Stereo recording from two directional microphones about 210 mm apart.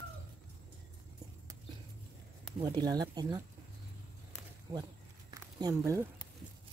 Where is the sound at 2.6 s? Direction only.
20° right (ahead or behind).